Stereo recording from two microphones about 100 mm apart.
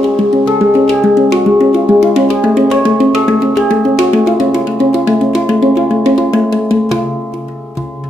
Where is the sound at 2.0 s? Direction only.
Centre (ahead or behind).